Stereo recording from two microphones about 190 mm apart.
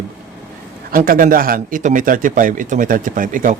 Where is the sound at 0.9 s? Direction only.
50° right (ahead or behind).